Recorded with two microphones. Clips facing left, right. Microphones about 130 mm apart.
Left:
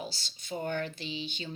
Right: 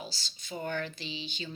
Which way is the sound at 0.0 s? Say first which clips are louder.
Left 3 dB; 55° left (ahead or behind).